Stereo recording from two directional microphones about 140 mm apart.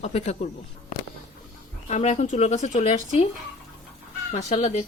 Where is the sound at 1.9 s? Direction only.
55° left (ahead or behind).